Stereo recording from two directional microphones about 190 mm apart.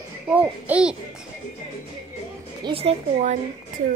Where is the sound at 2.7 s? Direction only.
30° right (ahead or behind).